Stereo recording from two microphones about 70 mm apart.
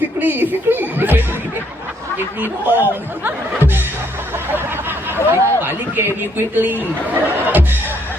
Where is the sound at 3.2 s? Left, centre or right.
Right.